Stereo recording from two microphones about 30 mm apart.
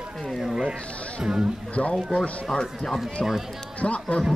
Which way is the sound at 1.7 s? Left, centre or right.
Left.